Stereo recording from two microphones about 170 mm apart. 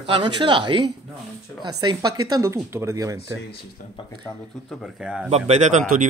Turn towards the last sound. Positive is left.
turn(degrees=-45)  # may be behind; listen again after turning